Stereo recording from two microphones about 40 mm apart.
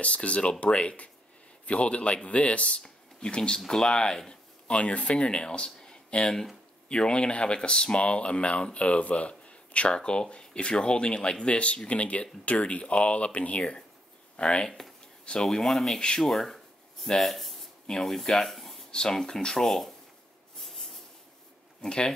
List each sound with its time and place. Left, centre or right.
0.0 s speech: left
4.6 s speech: left
15.6 s speech: centre
18.9 s speech: centre
20.6 s a sound: centre
21.8 s speech: left